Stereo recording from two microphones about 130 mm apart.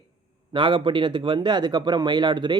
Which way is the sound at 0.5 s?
40° right (ahead or behind).